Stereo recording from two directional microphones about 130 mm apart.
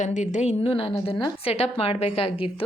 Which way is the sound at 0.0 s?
65° left (ahead or behind).